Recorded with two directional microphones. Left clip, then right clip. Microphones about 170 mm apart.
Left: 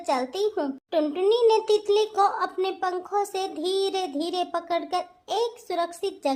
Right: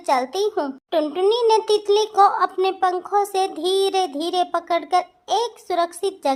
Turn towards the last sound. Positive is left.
turn(degrees=-25)  # may be behind; listen again after turning